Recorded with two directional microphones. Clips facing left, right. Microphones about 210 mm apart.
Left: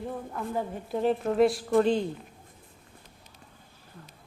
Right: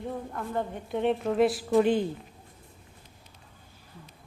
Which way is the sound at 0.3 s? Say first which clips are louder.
Left 1 dB; 5° left (ahead or behind).